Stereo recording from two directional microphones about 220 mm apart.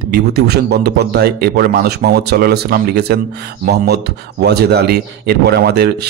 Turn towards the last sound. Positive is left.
turn(degrees=-45)  # may be behind; listen again after turning